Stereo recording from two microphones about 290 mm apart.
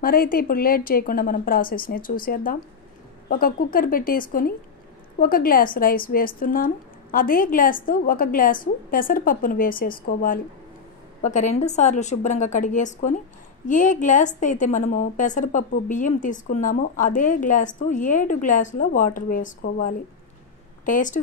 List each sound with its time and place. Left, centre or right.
0.0 s a woman's voice: left